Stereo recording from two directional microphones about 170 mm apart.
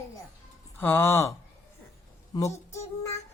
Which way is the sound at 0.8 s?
15° left (ahead or behind).